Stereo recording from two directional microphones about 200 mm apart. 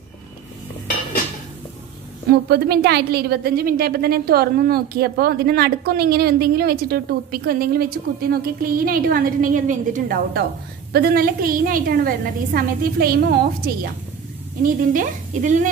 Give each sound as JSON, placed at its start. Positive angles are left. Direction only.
{"t": 2.4, "sound": "a woman's voice", "side_deg": -55}
{"t": 14.6, "sound": "a woman's voice", "side_deg": -40}